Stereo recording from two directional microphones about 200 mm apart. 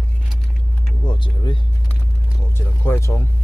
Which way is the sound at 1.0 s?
25° left (ahead or behind).